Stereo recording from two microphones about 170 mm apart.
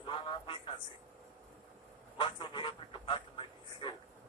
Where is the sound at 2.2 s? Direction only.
30° left (ahead or behind).